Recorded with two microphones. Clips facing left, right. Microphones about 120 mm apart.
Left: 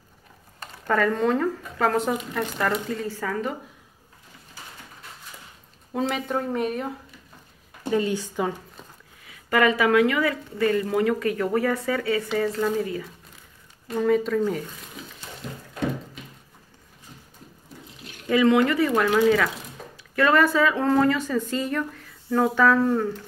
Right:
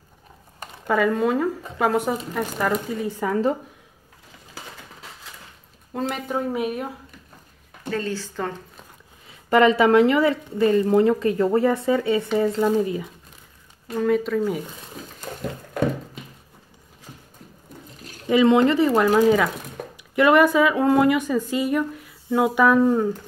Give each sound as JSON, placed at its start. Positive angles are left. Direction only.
{"t": 0.6, "sound": "speech", "side_deg": -10}
{"t": 5.9, "sound": "speech", "side_deg": 0}
{"t": 7.8, "sound": "speech", "side_deg": 15}
{"t": 9.3, "sound": "a woman's voice", "side_deg": -30}
{"t": 13.8, "sound": "speech", "side_deg": 0}
{"t": 15.3, "sound": "a sound", "side_deg": -55}
{"t": 17.9, "sound": "a sound", "side_deg": -40}
{"t": 18.3, "sound": "a woman's voice", "side_deg": -20}
{"t": 19.1, "sound": "speech", "side_deg": -15}
{"t": 19.8, "sound": "a sound", "side_deg": -65}
{"t": 20.2, "sound": "speech", "side_deg": -15}